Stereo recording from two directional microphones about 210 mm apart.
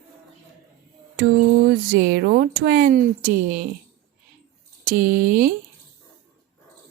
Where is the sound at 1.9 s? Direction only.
45° right (ahead or behind).